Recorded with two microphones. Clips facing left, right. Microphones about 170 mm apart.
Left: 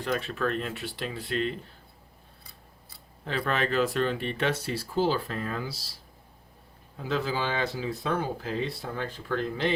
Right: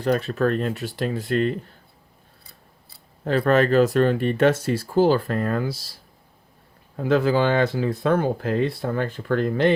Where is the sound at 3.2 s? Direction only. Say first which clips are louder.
Right 10 dB; 45° right (ahead or behind).